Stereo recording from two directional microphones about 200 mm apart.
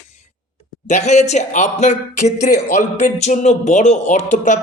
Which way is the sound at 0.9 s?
35° left (ahead or behind).